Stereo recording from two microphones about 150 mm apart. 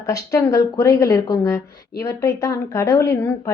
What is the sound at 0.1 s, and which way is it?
Speech, 20° left (ahead or behind).